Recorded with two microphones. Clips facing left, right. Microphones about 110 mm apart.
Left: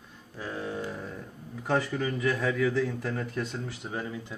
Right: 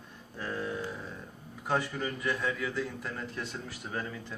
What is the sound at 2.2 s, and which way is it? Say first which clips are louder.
Speech: left 7 dB; 90° left.